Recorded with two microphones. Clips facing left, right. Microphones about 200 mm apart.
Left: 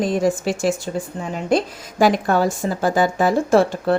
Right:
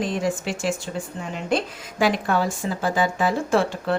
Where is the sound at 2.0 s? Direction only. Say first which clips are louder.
Left 5 dB; 45° left (ahead or behind).